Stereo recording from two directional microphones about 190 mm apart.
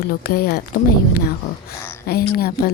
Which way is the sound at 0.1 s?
55° left (ahead or behind).